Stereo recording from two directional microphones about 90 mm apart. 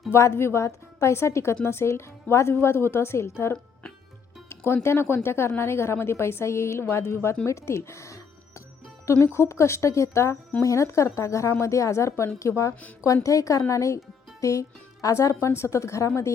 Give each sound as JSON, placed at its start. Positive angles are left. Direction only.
{"t": 0.1, "sound": "speech", "side_deg": 30}